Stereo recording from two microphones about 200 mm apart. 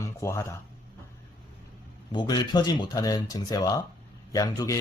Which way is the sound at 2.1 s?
20° left (ahead or behind).